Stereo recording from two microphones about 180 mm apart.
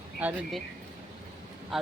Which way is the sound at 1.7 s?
Centre (ahead or behind).